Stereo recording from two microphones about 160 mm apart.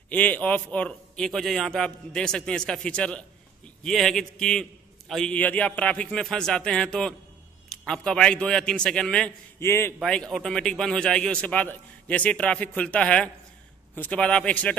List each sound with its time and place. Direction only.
0.1 s a man's voice: 10° left (ahead or behind)
9.6 s a man's voice: 15° left (ahead or behind)
9.9 s a man's voice: 5° left (ahead or behind)